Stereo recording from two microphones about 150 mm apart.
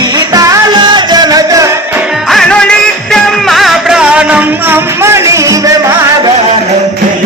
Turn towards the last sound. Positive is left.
turn(degrees=-20)  # may be behind; listen again after turning